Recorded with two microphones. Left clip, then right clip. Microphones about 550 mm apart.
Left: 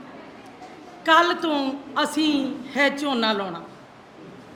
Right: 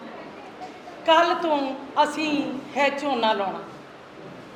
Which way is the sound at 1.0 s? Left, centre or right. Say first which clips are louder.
Left 1 dB; left.